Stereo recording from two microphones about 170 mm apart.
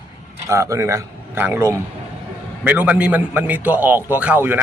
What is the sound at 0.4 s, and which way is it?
A man's voice, 15° right (ahead or behind).